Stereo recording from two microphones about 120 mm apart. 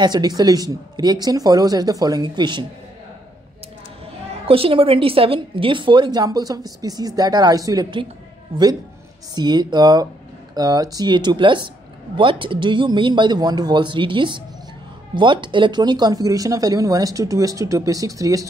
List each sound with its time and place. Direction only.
0.0 s a woman's voice: 35° right (ahead or behind)
4.3 s a woman's voice: 50° right (ahead or behind); by 7.9 s 30° right (ahead or behind)
8.5 s a man's voice: 50° right (ahead or behind)
9.3 s a woman's voice: 35° right (ahead or behind)